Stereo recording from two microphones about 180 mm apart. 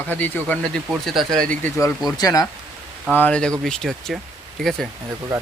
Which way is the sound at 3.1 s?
10° left (ahead or behind).